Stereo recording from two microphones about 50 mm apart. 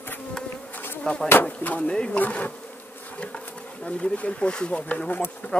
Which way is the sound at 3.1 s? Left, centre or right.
Left.